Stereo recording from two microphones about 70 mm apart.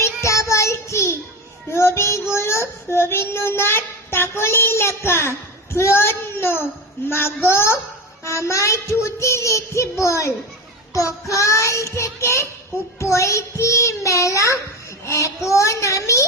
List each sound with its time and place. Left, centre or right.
0.0 s child singing: left
5.7 s speech: left
7.1 s child singing: left